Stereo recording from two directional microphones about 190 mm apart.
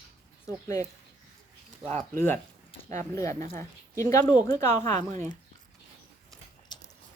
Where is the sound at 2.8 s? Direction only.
15° left (ahead or behind).